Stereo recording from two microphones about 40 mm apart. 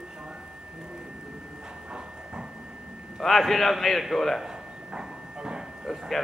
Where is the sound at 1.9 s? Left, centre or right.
Right.